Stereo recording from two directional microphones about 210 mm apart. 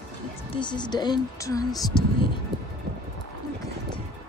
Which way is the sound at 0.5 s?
20° left (ahead or behind).